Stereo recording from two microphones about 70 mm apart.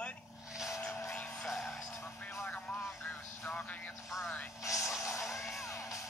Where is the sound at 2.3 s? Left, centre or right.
Left.